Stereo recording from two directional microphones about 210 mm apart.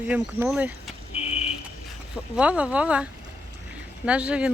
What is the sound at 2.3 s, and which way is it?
Speech, 5° right (ahead or behind).